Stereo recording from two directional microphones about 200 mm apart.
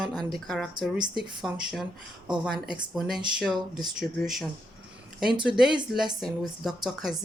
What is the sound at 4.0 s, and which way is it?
Speech, centre (ahead or behind).